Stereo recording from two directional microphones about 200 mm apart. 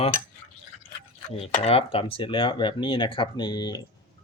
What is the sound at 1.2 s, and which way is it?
Speech, 30° left (ahead or behind).